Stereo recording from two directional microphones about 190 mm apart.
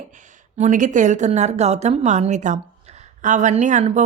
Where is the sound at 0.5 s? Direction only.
40° right (ahead or behind).